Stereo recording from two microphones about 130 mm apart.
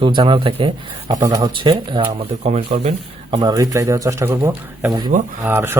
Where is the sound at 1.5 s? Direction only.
40° right (ahead or behind).